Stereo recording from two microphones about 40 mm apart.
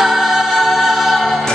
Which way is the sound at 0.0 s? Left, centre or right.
Centre.